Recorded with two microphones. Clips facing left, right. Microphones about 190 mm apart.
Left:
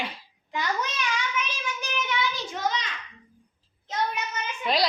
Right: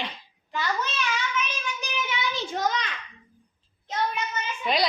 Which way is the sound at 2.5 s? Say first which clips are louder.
Right 3 dB; 50° right (ahead or behind).